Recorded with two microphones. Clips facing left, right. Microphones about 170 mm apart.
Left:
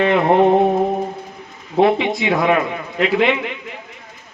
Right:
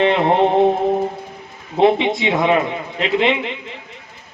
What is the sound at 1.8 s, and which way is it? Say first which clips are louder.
A man's voice: right 1 dB; 25° right (ahead or behind).